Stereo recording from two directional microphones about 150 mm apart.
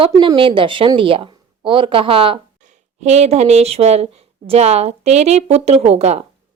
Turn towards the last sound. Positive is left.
turn(degrees=-45)  # may be behind; listen again after turning